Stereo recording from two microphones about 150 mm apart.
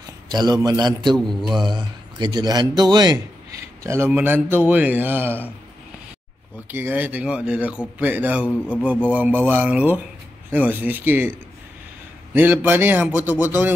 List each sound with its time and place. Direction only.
0.3 s a man's voice: 30° right (ahead or behind)
1.1 s a man's voice: centre (ahead or behind)
1.6 s a man's voice: 30° right (ahead or behind); by 5.4 s 15° right (ahead or behind)
6.7 s a man's voice: 10° right (ahead or behind)
8.5 s speech: 10° left (ahead or behind)
9.1 s a man's voice: 10° right (ahead or behind)
12.4 s a man's voice: 15° right (ahead or behind)